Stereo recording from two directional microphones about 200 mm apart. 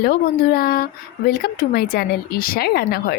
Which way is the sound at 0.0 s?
50° left (ahead or behind).